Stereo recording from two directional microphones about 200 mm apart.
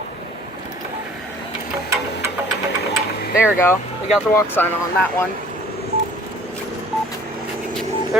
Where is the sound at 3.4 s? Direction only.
10° left (ahead or behind).